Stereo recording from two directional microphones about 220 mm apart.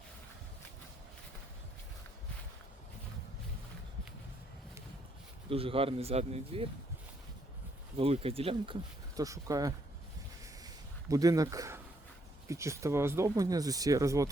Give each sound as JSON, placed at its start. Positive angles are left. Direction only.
{"t": 5.5, "sound": "speech", "side_deg": -25}
{"t": 7.9, "sound": "speech", "side_deg": -25}
{"t": 11.1, "sound": "speech", "side_deg": -15}